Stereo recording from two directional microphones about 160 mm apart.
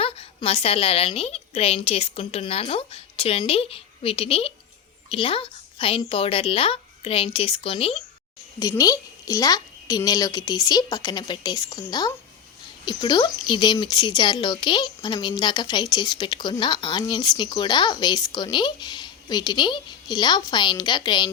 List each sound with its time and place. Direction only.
0.0 s a woman's voice: 35° left (ahead or behind)
8.8 s a woman's voice: 20° left (ahead or behind)